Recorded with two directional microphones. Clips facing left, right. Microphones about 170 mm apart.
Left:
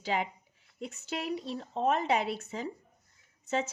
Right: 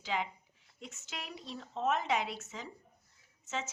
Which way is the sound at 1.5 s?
35° left (ahead or behind).